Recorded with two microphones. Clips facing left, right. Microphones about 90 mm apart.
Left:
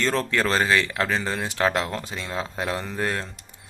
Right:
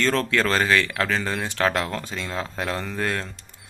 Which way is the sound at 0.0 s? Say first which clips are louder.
Right 1 dB; 20° left (ahead or behind).